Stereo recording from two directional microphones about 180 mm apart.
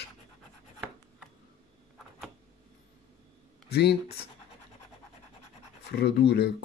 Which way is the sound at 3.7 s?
65° left (ahead or behind).